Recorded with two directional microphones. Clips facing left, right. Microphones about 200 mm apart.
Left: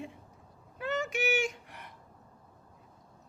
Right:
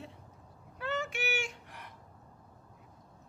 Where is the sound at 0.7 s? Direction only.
15° left (ahead or behind).